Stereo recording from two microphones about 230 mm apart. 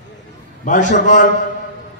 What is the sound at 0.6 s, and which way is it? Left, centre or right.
Speech, left.